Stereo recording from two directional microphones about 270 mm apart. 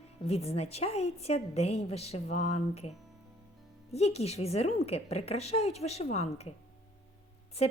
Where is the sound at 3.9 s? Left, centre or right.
Left.